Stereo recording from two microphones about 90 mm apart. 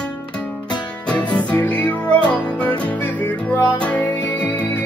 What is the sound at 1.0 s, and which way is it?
Music, 15° left (ahead or behind).